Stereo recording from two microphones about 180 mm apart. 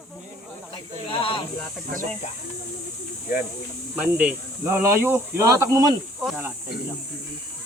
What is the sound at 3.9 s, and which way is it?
Speech, 5° right (ahead or behind).